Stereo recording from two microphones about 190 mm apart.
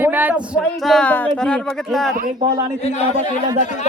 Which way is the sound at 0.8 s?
5° left (ahead or behind).